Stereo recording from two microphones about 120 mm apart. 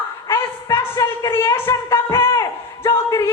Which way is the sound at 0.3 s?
20° left (ahead or behind).